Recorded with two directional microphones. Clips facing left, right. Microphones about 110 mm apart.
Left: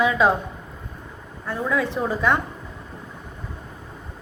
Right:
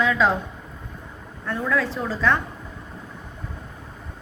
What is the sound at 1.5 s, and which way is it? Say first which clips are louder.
Speech: even; 15° left (ahead or behind).